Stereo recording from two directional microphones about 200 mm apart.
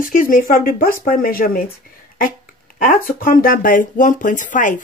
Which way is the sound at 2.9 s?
45° left (ahead or behind).